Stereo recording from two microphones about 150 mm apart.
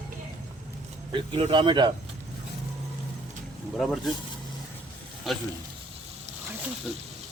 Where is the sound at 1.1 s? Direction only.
35° right (ahead or behind).